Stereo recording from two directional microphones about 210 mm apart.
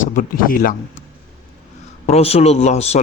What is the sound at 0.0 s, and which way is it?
Speech, 40° left (ahead or behind).